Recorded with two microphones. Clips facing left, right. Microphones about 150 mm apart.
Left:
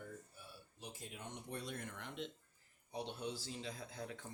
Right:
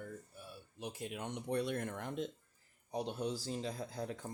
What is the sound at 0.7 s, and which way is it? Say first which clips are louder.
Speech: right 9 dB; 65° right (ahead or behind).